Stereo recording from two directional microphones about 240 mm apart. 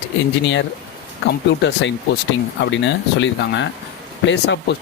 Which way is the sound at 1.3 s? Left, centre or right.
Left.